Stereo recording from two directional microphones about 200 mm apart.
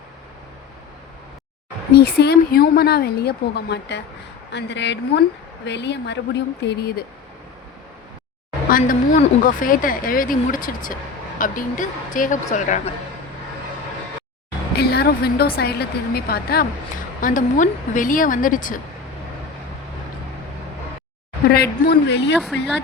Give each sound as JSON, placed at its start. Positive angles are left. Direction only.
{"t": 1.9, "sound": "a woman's voice", "side_deg": 50}
{"t": 8.7, "sound": "a woman's voice", "side_deg": 45}
{"t": 14.8, "sound": "a woman's voice", "side_deg": 50}
{"t": 21.5, "sound": "speech", "side_deg": 55}